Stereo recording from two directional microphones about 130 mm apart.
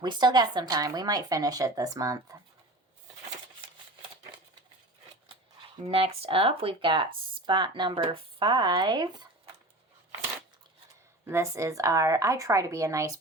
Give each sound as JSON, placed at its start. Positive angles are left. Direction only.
{"t": 0.0, "sound": "speech", "side_deg": -35}
{"t": 5.9, "sound": "speech", "side_deg": -50}
{"t": 11.3, "sound": "speech", "side_deg": -20}